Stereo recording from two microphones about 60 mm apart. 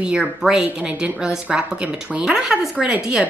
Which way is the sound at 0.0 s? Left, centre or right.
Centre.